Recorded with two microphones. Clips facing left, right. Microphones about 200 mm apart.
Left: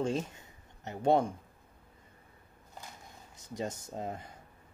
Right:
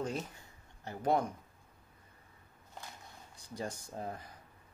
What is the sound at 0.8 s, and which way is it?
Speech, 30° left (ahead or behind).